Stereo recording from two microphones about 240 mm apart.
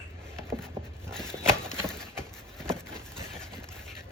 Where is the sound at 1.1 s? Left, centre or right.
Centre.